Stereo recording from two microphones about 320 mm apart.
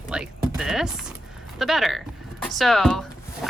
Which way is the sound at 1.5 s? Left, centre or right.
Centre.